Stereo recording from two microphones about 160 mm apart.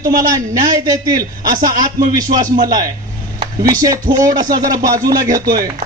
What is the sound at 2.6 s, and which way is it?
Speech, 25° right (ahead or behind).